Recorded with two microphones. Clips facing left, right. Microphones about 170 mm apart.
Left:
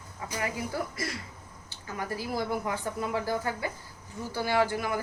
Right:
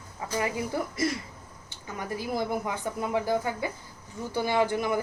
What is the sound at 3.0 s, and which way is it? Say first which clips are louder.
Speech: right 6 dB; 20° right (ahead or behind).